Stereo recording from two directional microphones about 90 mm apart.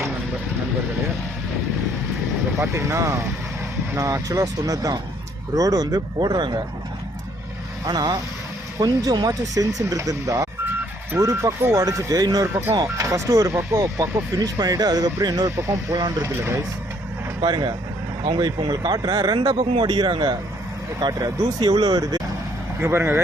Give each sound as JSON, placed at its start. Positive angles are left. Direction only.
{"t": 2.6, "sound": "speech", "side_deg": -30}
{"t": 7.9, "sound": "speech", "side_deg": -50}
{"t": 13.1, "sound": "speech", "side_deg": -35}
{"t": 15.4, "sound": "speech", "side_deg": -35}
{"t": 17.4, "sound": "speech", "side_deg": -50}
{"t": 21.0, "sound": "speech", "side_deg": -40}
{"t": 22.8, "sound": "speech", "side_deg": -25}